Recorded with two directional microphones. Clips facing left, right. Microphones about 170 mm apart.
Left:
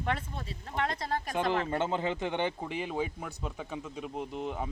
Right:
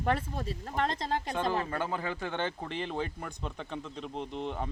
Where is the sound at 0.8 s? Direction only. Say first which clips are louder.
Right 1 dB; 25° right (ahead or behind).